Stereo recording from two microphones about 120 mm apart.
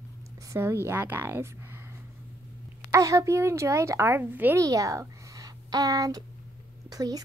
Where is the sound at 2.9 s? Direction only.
25° right (ahead or behind).